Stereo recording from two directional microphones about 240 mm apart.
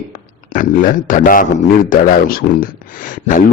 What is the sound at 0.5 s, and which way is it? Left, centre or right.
Speech, left.